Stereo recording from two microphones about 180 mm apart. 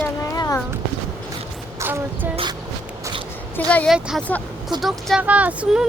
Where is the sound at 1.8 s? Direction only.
15° right (ahead or behind).